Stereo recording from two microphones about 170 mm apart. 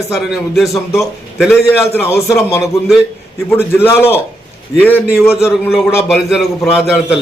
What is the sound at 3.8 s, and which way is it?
Speech, 15° left (ahead or behind).